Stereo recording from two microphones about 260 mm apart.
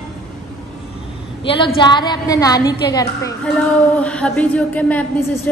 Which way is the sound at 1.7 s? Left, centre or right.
Centre.